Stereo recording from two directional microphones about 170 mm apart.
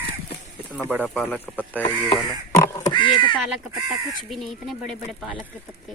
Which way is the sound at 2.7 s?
25° left (ahead or behind).